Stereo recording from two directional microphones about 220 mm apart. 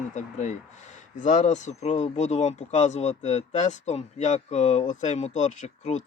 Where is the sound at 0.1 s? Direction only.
30° left (ahead or behind).